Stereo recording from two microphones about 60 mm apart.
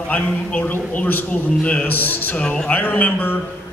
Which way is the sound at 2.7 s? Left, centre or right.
Left.